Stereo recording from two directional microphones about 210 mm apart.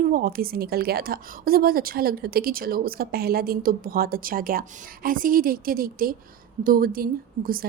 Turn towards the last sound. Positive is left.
turn(degrees=-45)  # may be behind; listen again after turning